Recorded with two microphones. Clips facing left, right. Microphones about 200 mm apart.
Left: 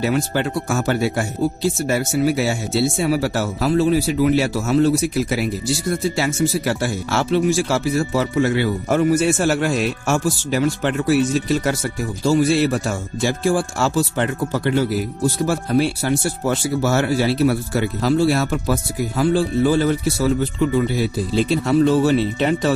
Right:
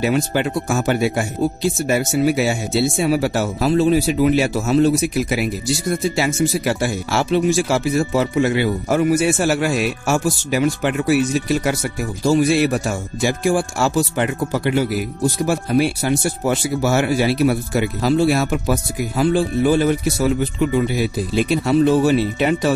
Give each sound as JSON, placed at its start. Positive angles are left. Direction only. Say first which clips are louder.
{"t": 0.0, "sound": "speech", "louder": "right 1 dB", "side_deg": -15}